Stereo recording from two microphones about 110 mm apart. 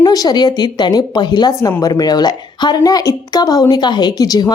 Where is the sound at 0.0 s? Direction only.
35° left (ahead or behind).